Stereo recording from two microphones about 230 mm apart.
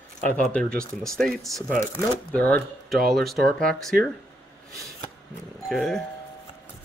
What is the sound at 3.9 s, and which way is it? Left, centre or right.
Speech, right.